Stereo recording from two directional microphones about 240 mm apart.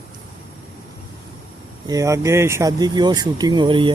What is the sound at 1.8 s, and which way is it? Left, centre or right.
Speech, centre.